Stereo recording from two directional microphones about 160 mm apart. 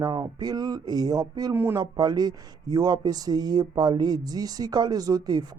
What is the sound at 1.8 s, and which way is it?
Speech, 25° right (ahead or behind).